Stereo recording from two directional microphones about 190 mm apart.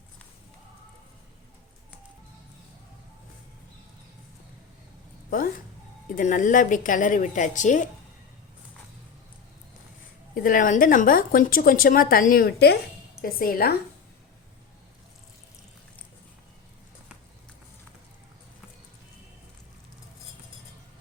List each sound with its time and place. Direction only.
6.1 s a woman's voice: 45° left (ahead or behind)
10.3 s a woman's voice: 45° left (ahead or behind)